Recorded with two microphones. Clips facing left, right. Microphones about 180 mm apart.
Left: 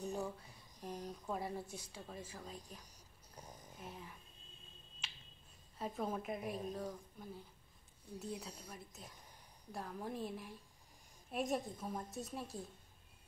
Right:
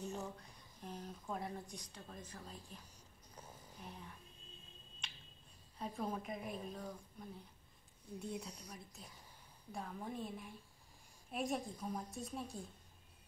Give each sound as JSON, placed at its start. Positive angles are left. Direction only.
{"t": 0.0, "sound": "a sound", "side_deg": 15}
{"t": 0.9, "sound": "a woman's voice", "side_deg": 15}
{"t": 3.3, "sound": "a sound", "side_deg": 15}
{"t": 3.7, "sound": "speech", "side_deg": 0}
{"t": 5.0, "sound": "finger snapping", "side_deg": 5}
{"t": 5.8, "sound": "a woman's voice", "side_deg": 5}
{"t": 8.6, "sound": "a woman's voice", "side_deg": 0}